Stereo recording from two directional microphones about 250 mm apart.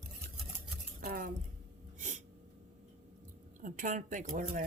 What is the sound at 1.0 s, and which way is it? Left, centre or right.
Speech, right.